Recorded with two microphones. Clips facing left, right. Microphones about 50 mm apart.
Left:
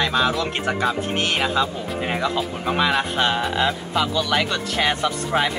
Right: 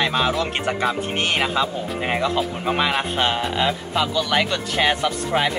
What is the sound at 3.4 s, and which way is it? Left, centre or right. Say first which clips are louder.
Speech: even; centre.